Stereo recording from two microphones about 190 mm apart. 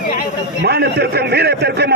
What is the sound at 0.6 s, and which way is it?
A man's voice, 60° right (ahead or behind).